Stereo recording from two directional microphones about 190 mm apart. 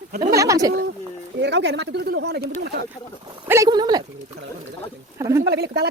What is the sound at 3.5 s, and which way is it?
Speech, 20° right (ahead or behind).